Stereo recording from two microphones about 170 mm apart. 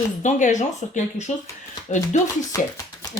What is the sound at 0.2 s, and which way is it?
Speech, 45° left (ahead or behind).